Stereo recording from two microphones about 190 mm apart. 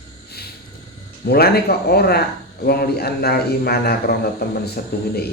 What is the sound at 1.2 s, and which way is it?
Speech, 55° left (ahead or behind).